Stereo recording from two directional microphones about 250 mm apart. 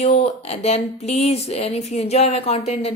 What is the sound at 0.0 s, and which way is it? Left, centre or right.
A woman's voice, left.